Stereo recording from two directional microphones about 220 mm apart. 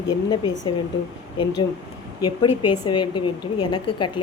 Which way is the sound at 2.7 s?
20° left (ahead or behind).